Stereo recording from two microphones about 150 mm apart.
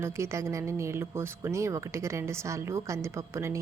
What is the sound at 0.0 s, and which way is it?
A woman's voice, 20° right (ahead or behind).